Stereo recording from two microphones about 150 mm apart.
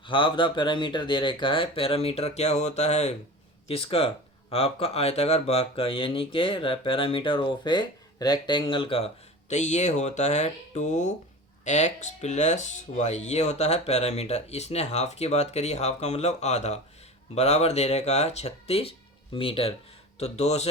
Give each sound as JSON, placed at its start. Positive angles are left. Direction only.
{"t": 0.0, "sound": "speech", "side_deg": 35}
{"t": 9.5, "sound": "speech", "side_deg": 50}